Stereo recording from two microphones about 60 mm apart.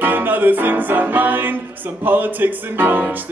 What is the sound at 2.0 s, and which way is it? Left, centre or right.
A man's voice, right.